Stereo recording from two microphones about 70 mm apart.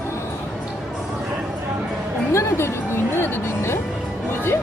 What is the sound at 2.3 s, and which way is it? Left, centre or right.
Music, left.